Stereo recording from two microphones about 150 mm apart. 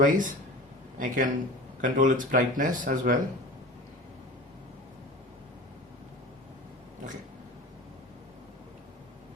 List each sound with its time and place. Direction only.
0.0 s speech: 60° right (ahead or behind)